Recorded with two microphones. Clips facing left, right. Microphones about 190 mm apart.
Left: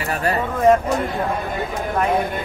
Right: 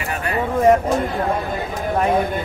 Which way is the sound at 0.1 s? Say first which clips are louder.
Left 3 dB; 40° left (ahead or behind).